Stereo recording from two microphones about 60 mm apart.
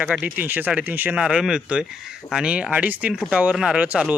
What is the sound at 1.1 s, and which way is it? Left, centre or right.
Speech, centre.